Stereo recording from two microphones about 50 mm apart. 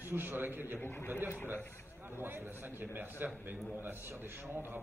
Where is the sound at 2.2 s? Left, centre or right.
Right.